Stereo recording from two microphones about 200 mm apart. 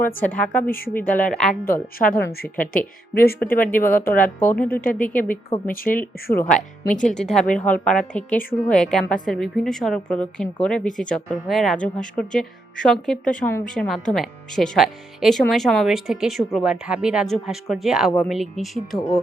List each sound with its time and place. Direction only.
0.0 s a woman's voice: 10° left (ahead or behind)
2.0 s a woman's voice: 50° left (ahead or behind)
4.2 s a woman's voice: 10° left (ahead or behind)
4.7 s a woman's voice: 45° left (ahead or behind)
4.9 s a woman's voice: 10° left (ahead or behind)
5.6 s a woman's voice: 45° left (ahead or behind)
7.2 s speech: 5° left (ahead or behind)